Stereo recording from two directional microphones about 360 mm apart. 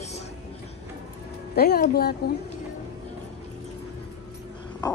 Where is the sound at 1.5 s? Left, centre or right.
Left.